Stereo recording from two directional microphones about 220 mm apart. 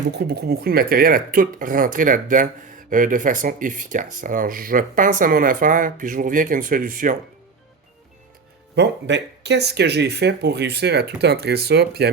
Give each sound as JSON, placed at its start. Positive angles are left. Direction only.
{"t": 0.1, "sound": "speech", "side_deg": -45}
{"t": 8.7, "sound": "speech", "side_deg": -50}